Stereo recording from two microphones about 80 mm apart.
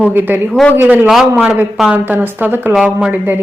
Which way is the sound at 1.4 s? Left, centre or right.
Centre.